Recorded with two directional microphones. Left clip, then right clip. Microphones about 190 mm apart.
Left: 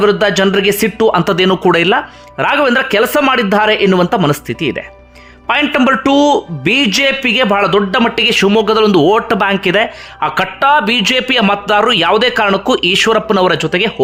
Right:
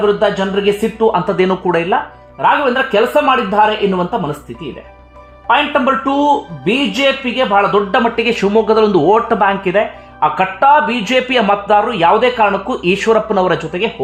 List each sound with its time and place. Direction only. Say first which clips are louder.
0.0 s a man's voice: left 3 dB; 35° left (ahead or behind)
6.0 s speech: left 3 dB; 35° left (ahead or behind); by 13.9 s 15° left (ahead or behind)